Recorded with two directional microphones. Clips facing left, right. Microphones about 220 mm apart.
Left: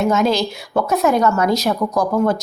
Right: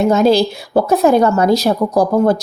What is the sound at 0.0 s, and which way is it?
Speech, 30° right (ahead or behind).